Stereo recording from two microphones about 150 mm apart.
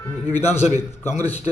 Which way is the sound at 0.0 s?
15° left (ahead or behind).